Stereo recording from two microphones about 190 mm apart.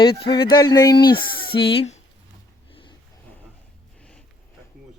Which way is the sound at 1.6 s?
60° left (ahead or behind).